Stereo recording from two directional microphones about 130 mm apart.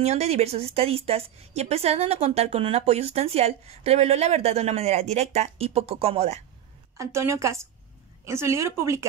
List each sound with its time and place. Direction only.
0.0 s a woman's voice: 55° right (ahead or behind)
7.0 s a woman's voice: 20° right (ahead or behind)